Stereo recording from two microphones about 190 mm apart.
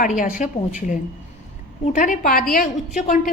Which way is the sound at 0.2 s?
40° left (ahead or behind).